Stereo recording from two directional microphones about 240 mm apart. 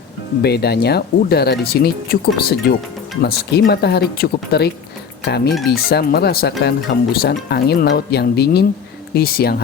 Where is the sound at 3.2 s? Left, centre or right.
Left.